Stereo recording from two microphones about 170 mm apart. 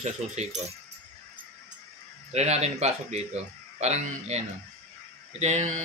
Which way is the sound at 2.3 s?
40° right (ahead or behind).